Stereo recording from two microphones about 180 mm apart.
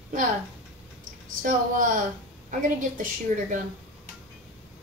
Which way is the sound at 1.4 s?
45° right (ahead or behind).